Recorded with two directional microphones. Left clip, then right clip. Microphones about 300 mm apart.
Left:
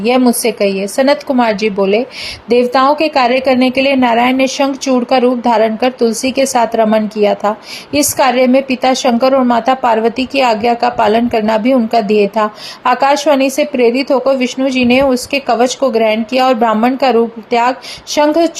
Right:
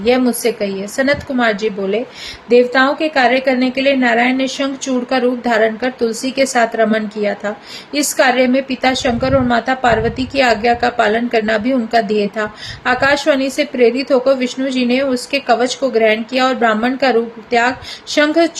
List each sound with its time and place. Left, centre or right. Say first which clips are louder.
0.0 s a woman's voice: left 3 dB; centre